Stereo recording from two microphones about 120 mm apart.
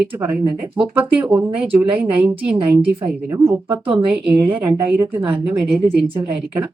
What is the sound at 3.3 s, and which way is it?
A woman's voice, 20° right (ahead or behind).